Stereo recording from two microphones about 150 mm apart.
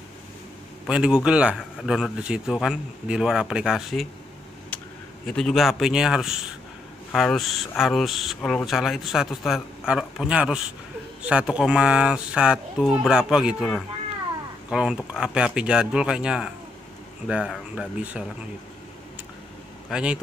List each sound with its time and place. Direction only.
0.8 s speech: 5° right (ahead or behind)
5.2 s speech: 5° left (ahead or behind)
8.6 s speech: centre (ahead or behind)
19.9 s speech: 5° right (ahead or behind)